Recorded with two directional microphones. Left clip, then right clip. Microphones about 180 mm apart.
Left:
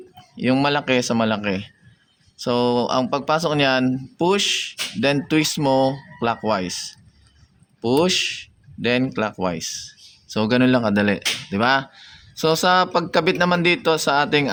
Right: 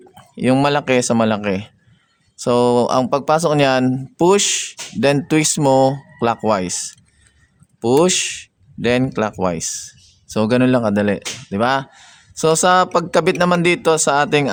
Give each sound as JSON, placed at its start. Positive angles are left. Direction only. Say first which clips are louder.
{"t": 0.2, "sound": "speech", "louder": "right 4 dB", "side_deg": -50}